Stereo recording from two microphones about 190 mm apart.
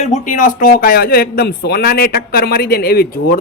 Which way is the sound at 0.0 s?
40° left (ahead or behind).